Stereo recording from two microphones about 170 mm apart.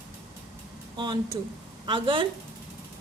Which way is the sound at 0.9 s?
25° right (ahead or behind).